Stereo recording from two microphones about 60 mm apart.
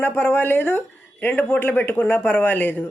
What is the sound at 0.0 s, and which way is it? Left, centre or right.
Speech, left.